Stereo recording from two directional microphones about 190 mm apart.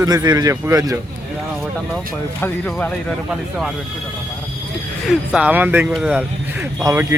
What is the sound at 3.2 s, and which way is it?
Speech, centre (ahead or behind).